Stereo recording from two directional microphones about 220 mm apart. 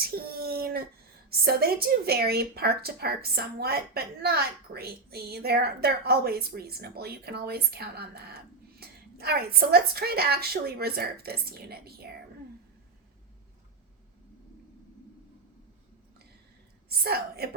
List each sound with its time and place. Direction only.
0.0 s child singing: 45° right (ahead or behind)
1.5 s speech: 45° right (ahead or behind)
17.0 s speech: 45° right (ahead or behind)